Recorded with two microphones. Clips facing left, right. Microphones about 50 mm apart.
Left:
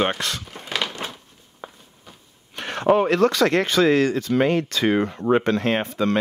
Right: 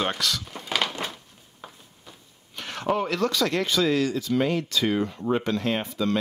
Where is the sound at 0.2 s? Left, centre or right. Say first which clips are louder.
Even; left.